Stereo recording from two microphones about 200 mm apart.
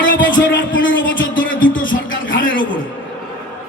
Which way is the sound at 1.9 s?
70° left (ahead or behind).